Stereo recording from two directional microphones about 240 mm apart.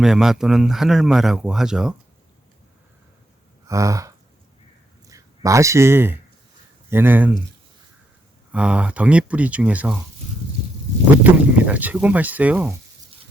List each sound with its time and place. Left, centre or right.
0.0 s speech: centre
3.7 s gasp: centre
5.0 s speech: centre
8.5 s speech: centre
11.2 s speech: centre